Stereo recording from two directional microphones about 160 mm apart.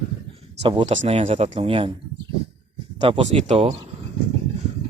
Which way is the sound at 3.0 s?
40° right (ahead or behind).